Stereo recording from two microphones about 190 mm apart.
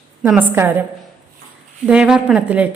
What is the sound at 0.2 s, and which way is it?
Speech, 10° right (ahead or behind).